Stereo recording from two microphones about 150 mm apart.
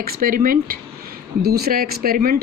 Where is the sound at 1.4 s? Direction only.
90° right.